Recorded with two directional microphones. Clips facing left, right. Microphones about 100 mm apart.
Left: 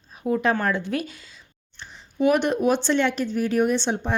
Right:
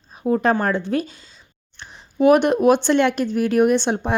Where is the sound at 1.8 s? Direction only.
45° right (ahead or behind).